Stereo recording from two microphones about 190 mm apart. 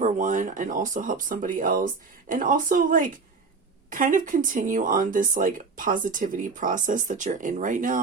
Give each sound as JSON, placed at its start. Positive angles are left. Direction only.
{"t": 0.0, "sound": "speech", "side_deg": -40}